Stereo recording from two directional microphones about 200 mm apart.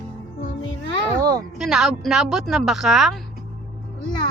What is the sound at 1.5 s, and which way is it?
Speech, centre (ahead or behind).